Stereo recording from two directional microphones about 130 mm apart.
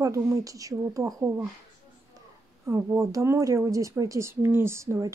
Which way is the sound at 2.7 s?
20° right (ahead or behind).